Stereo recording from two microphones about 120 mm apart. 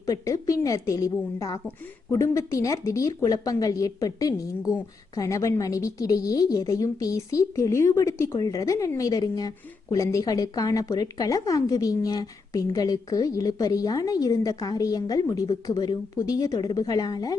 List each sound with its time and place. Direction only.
0.0 s a woman's voice: 25° left (ahead or behind)